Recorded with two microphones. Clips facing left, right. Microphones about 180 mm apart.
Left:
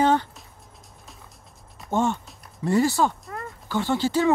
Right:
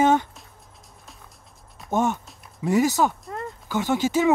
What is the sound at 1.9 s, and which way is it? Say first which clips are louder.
Speech: even; 15° right (ahead or behind).